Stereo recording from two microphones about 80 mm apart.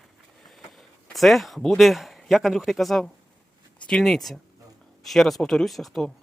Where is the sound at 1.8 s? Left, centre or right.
Centre.